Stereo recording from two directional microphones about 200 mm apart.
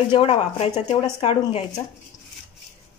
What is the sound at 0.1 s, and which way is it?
Speech, 30° left (ahead or behind).